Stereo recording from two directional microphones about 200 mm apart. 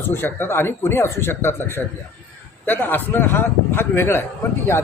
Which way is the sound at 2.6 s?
10° left (ahead or behind).